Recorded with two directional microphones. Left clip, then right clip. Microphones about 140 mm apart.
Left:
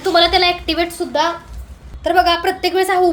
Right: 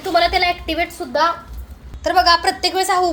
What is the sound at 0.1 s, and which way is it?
A woman's voice, 15° left (ahead or behind).